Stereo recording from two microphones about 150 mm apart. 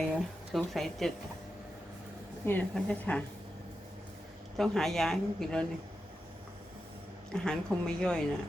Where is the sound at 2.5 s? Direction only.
10° left (ahead or behind).